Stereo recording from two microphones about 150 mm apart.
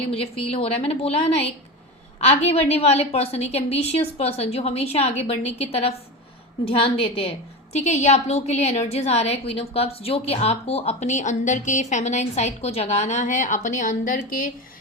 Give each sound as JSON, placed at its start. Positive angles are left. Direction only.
{"t": 0.0, "sound": "a woman's voice", "side_deg": 40}
{"t": 7.8, "sound": "a woman's voice", "side_deg": 50}